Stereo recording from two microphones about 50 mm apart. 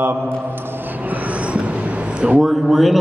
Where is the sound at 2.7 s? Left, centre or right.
Centre.